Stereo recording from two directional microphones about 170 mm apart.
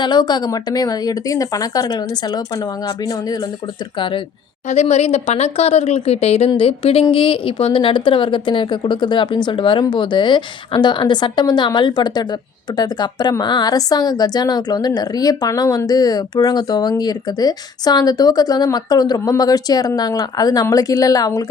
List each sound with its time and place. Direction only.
0.0 s a woman's voice: 25° left (ahead or behind)
4.7 s a woman's voice: 40° left (ahead or behind); by 21.4 s 20° left (ahead or behind)